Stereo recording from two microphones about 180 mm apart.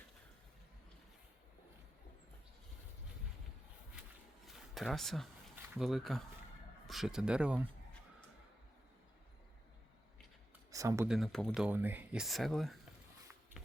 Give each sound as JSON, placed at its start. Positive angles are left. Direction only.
{"t": 4.4, "sound": "a sound", "side_deg": 0}
{"t": 5.7, "sound": "speech", "side_deg": 0}
{"t": 10.7, "sound": "speech", "side_deg": -15}
{"t": 11.1, "sound": "speech", "side_deg": 0}